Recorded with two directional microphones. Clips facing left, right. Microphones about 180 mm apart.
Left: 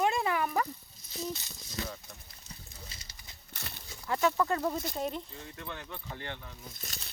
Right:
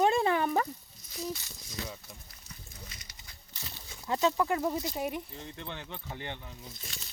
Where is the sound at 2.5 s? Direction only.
30° left (ahead or behind).